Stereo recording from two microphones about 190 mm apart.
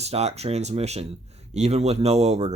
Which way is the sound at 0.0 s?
35° right (ahead or behind).